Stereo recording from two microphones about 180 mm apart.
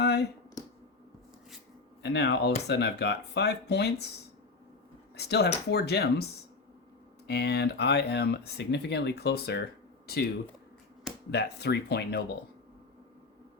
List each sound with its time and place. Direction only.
0.0 s a sound: 65° left (ahead or behind)
2.0 s speech: 70° left (ahead or behind)
5.1 s speech: 65° left (ahead or behind)
7.3 s speech: 65° left (ahead or behind)
11.3 s speech: 65° left (ahead or behind)